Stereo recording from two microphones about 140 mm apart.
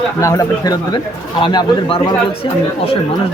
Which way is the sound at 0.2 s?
25° left (ahead or behind).